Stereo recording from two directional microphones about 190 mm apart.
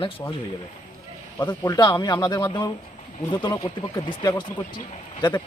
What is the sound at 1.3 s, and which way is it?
A man's voice, 15° left (ahead or behind).